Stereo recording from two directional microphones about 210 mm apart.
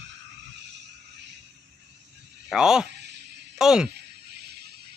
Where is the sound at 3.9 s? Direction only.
50° right (ahead or behind).